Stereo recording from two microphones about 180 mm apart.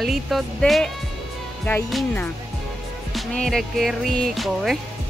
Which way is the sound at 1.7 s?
10° left (ahead or behind).